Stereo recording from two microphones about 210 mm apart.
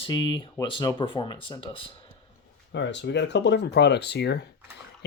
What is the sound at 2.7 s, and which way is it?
Speech, 55° left (ahead or behind).